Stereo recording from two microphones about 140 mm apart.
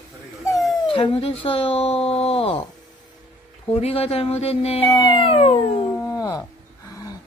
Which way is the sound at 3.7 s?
45° left (ahead or behind).